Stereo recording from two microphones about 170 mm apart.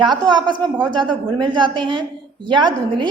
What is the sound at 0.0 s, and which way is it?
A woman's voice, 25° right (ahead or behind).